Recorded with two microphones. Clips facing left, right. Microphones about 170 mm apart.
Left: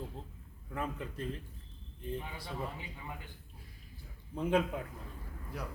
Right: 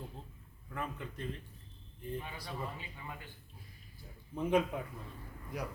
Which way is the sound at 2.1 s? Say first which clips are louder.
Left 1 dB; 20° left (ahead or behind).